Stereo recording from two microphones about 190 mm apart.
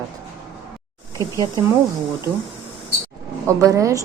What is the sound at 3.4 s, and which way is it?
Chink, 15° right (ahead or behind).